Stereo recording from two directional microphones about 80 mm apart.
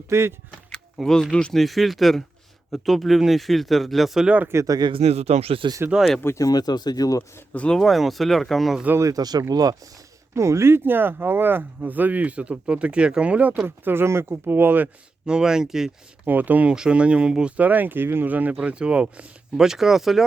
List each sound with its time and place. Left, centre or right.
0.1 s speech: right
0.9 s speech: centre
1.6 s speech: centre
4.6 s speech: right
5.6 s speech: right
6.2 s speech: left
6.5 s speech: left
7.2 s speech: centre
7.8 s speech: centre
9.0 s speech: right
10.3 s speech: right; by 13.7 s centre
13.7 s speech: right
15.3 s speech: centre
16.2 s speech: right; by 20.2 s centre